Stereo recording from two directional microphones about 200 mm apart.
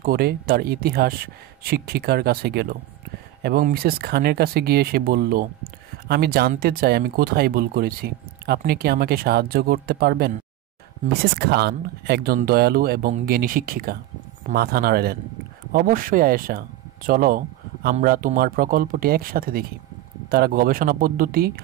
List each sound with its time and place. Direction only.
0.0 s speech: 50° right (ahead or behind)
11.3 s speech: 55° right (ahead or behind)